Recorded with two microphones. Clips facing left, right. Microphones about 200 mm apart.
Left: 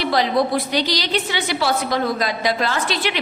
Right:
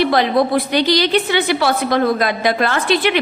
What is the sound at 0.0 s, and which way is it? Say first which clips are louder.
A woman's voice: right 4 dB; 55° right (ahead or behind).